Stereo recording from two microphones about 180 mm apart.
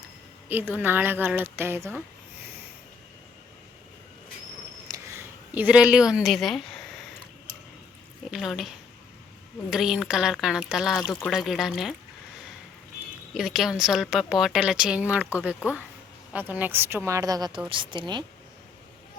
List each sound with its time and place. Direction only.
0.4 s speech: 10° right (ahead or behind)
4.9 s a sound: 10° right (ahead or behind)
8.3 s a woman's voice: centre (ahead or behind)
13.3 s a woman's voice: centre (ahead or behind); by 18.3 s 25° right (ahead or behind)